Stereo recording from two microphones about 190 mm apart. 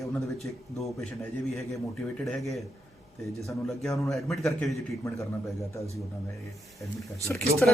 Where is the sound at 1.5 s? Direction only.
Centre (ahead or behind).